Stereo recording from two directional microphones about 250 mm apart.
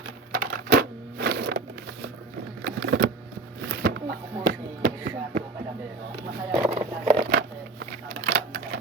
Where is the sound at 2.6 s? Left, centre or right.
Right.